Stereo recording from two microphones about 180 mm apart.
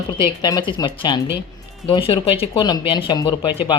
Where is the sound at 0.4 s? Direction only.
25° left (ahead or behind).